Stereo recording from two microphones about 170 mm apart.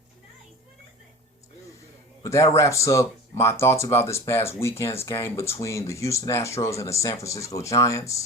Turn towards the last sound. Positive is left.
turn(degrees=20)  # may be behind; listen again after turning